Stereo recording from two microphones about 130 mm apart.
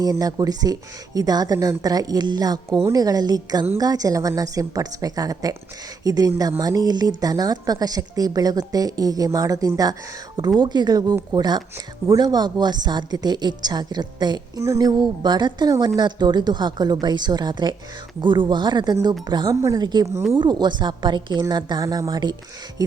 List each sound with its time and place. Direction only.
0.0 s a woman's voice: 30° right (ahead or behind)